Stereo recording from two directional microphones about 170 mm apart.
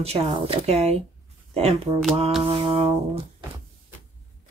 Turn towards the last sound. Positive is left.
turn(degrees=-35)  # may be behind; listen again after turning